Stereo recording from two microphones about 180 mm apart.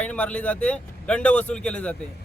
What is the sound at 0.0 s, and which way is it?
Speech, 5° left (ahead or behind).